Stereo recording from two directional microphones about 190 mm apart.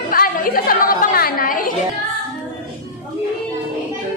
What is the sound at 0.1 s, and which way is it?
Chatter, 50° left (ahead or behind).